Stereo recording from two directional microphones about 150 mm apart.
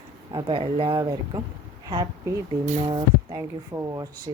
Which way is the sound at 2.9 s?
25° right (ahead or behind).